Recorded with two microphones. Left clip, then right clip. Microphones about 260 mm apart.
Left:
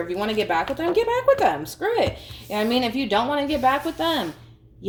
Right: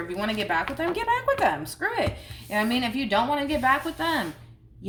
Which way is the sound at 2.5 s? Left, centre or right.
Right.